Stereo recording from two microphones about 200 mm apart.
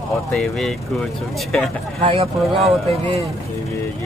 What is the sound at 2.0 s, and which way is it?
Speech, 30° right (ahead or behind).